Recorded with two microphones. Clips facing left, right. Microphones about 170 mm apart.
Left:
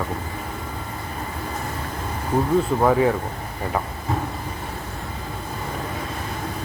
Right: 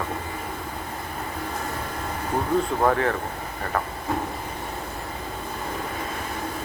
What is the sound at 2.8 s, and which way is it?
Speech, 10° left (ahead or behind).